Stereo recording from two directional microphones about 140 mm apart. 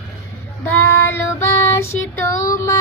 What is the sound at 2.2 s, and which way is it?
Speech, 20° left (ahead or behind).